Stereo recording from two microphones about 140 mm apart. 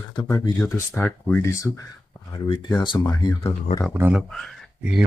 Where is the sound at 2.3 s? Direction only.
30° left (ahead or behind).